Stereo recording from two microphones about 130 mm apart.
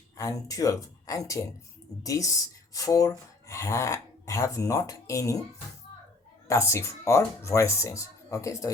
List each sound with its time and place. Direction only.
0.2 s speech: 25° left (ahead or behind)
6.5 s speech: 20° left (ahead or behind)